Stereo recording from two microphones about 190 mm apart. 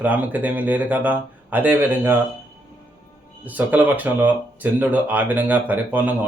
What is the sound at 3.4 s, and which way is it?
Speech, 10° right (ahead or behind).